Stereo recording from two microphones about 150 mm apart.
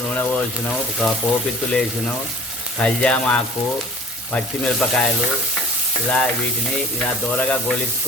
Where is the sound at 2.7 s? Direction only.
5° left (ahead or behind).